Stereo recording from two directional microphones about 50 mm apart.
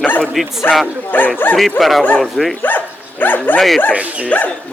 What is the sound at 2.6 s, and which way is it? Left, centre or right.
Speech, left.